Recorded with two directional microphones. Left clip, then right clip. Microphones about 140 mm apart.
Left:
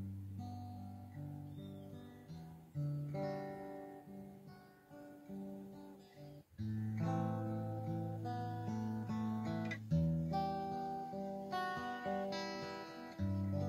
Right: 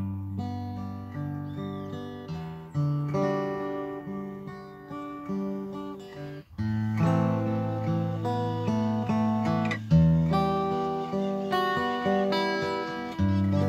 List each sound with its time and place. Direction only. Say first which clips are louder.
3.1 s music: right 15 dB; 20° right (ahead or behind)
7.0 s music: right 14 dB; 25° right (ahead or behind)